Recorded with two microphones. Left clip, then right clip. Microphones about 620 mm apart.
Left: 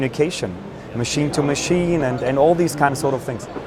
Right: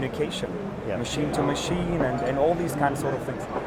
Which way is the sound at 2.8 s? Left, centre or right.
Left.